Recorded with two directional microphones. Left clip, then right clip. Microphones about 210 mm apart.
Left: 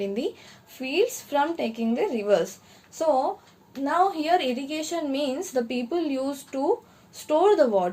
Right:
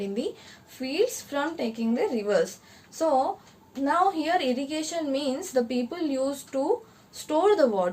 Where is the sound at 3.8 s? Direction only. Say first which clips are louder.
Left 1 dB; 30° left (ahead or behind).